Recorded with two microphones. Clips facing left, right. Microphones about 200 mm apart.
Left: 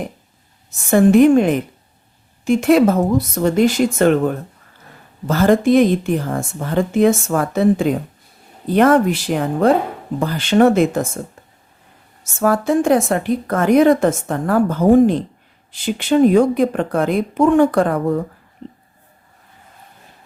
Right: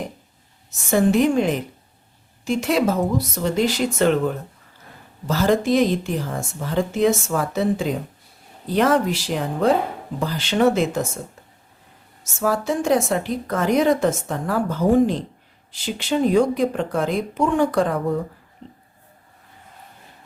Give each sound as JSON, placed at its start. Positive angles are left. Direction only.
{"t": 0.9, "sound": "a woman's voice", "side_deg": 55}
{"t": 12.4, "sound": "a woman's voice", "side_deg": 55}